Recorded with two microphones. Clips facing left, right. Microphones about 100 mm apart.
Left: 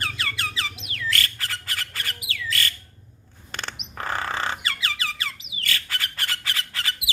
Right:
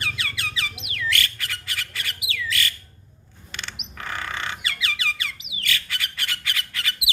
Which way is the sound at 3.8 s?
35° left (ahead or behind).